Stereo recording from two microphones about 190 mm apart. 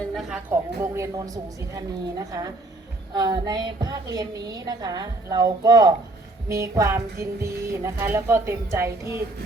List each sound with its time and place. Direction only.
0.3 s music: 10° right (ahead or behind)
1.7 s a woman's voice: 20° right (ahead or behind)
6.5 s music: 15° right (ahead or behind)